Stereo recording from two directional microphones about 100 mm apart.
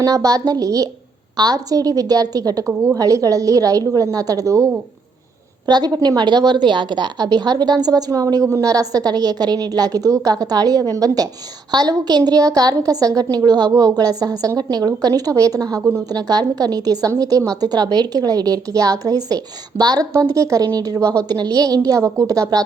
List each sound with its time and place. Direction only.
0.0 s a woman's voice: 35° right (ahead or behind)
5.6 s a woman's voice: 45° right (ahead or behind)